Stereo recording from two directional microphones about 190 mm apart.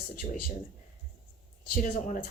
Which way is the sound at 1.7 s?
40° left (ahead or behind).